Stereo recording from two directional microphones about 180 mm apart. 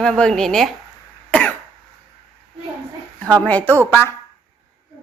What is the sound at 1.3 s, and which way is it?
Cough, 10° left (ahead or behind).